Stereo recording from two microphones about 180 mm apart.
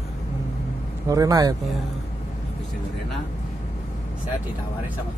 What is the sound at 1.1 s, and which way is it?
Speech, 20° right (ahead or behind).